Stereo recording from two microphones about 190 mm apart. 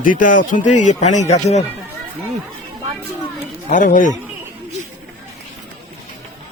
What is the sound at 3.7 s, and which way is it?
Speech, 45° left (ahead or behind).